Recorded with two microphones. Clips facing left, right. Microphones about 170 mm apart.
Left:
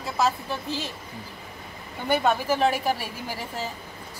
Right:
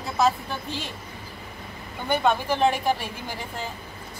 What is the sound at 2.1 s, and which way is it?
A woman's voice, 5° left (ahead or behind).